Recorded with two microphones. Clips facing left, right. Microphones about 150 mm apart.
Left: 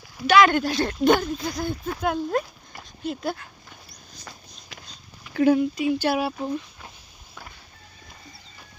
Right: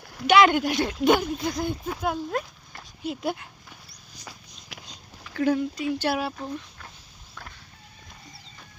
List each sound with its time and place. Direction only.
0.3 s speech: 20° right (ahead or behind)
4.2 s a sound: 15° right (ahead or behind)
5.3 s speech: 15° left (ahead or behind)